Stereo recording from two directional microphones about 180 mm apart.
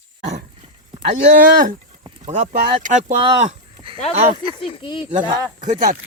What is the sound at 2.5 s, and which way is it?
Speech, 50° right (ahead or behind).